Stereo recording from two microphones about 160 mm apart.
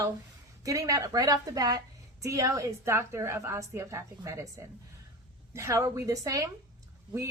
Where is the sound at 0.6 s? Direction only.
20° right (ahead or behind).